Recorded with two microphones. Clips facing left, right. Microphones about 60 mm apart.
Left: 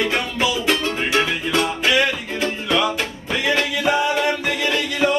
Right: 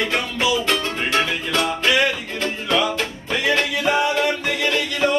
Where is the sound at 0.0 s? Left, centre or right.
Centre.